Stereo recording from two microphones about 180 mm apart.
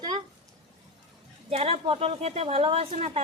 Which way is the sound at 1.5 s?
35° right (ahead or behind).